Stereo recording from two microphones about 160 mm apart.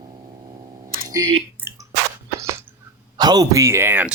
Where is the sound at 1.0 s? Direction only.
25° right (ahead or behind).